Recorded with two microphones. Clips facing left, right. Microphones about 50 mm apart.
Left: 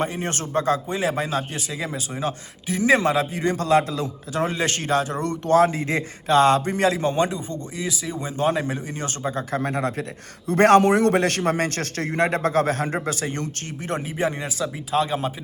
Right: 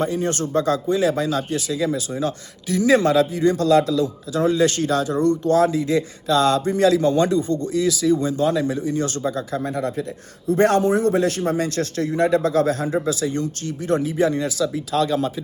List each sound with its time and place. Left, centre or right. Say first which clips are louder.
0.0 s speech: right 4 dB; left
8.4 s speech: right 3 dB; left
9.5 s a man's voice: even; left